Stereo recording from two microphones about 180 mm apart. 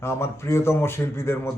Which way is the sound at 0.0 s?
15° left (ahead or behind).